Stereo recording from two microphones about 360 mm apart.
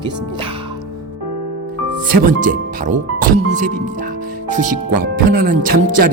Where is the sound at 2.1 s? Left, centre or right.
Right.